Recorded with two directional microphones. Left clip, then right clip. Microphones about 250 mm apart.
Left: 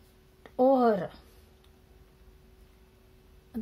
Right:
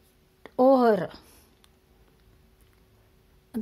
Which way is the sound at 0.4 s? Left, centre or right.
Right.